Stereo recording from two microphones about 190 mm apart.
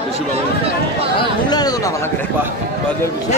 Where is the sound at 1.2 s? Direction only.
20° left (ahead or behind).